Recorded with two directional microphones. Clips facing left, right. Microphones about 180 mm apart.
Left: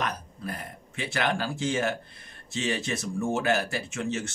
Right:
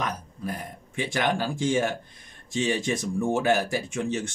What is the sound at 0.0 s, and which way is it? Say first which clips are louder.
Speech: right 1 dB; 15° right (ahead or behind).